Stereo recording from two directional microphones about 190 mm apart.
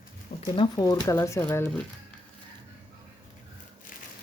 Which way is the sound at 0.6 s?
20° left (ahead or behind).